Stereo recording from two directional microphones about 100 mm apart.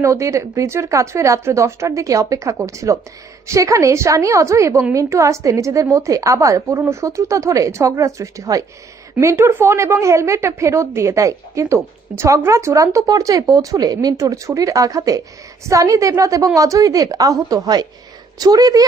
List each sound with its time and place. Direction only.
0.0 s a woman's voice: 30° right (ahead or behind)